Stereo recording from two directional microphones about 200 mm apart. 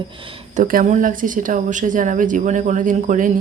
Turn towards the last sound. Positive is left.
turn(degrees=-40)  # may be behind; listen again after turning